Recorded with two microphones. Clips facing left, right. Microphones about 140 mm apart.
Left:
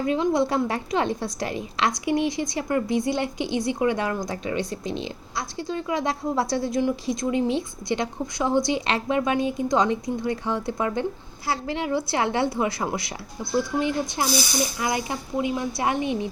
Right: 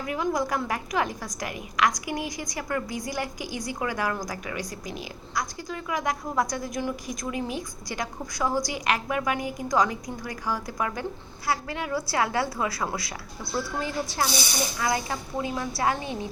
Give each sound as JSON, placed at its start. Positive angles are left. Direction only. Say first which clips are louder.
{"t": 0.0, "sound": "a woman's voice", "louder": "left 5 dB", "side_deg": 25}